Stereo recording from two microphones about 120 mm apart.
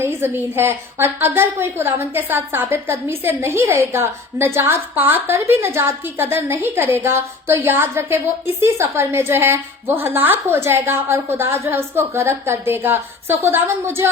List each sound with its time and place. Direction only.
0.0 s a woman's voice: 20° right (ahead or behind)